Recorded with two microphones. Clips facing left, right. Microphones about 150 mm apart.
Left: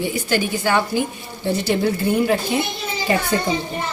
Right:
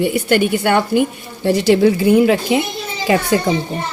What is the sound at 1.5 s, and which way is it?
A woman's voice, 90° right.